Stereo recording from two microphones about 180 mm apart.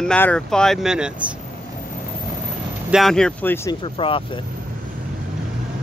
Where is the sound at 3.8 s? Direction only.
30° left (ahead or behind).